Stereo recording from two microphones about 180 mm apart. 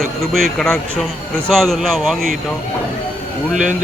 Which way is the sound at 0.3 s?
5° left (ahead or behind).